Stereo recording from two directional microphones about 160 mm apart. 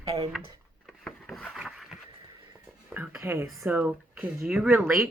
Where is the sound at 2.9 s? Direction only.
15° right (ahead or behind).